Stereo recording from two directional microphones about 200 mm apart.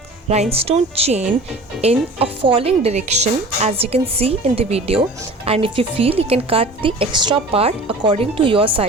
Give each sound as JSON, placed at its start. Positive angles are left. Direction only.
{"t": 0.5, "sound": "a woman's voice", "side_deg": -30}